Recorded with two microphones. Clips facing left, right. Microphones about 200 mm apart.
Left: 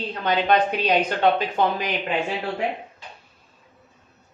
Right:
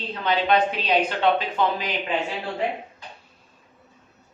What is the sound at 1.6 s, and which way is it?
Speech, 45° left (ahead or behind).